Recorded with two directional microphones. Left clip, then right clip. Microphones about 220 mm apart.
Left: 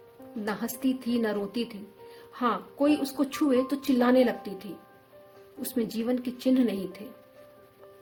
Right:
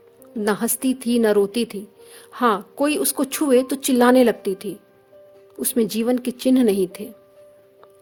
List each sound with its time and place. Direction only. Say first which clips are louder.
0.4 s a woman's voice: right 9 dB; 50° right (ahead or behind)
5.7 s a woman's voice: right 9 dB; 50° right (ahead or behind)